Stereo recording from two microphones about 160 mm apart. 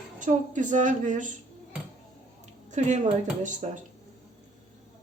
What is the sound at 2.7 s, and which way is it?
A woman's voice, 45° right (ahead or behind).